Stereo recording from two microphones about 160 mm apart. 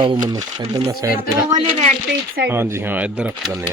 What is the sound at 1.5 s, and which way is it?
Speech, 50° right (ahead or behind).